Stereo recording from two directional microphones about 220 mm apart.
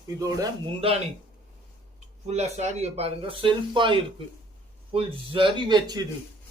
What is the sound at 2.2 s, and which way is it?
A man's voice, 30° right (ahead or behind).